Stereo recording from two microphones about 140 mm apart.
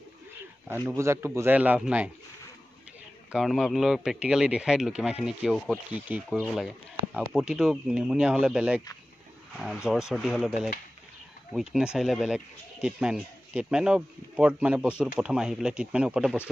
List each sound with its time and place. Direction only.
0.8 s speech: 20° right (ahead or behind)
3.3 s a man's voice: centre (ahead or behind)
6.4 s a man's voice: centre (ahead or behind)
9.8 s a man's voice: 5° right (ahead or behind)
11.7 s a man's voice: 5° right (ahead or behind)